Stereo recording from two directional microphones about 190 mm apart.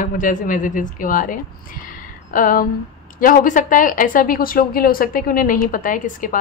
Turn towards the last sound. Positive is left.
turn(degrees=45)  # may be behind; listen again after turning